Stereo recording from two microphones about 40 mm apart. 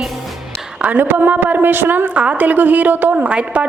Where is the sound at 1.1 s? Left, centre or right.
Right.